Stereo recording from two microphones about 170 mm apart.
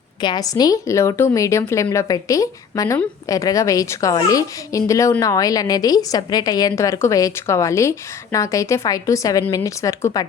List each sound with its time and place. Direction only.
0.2 s a woman's voice: 25° left (ahead or behind)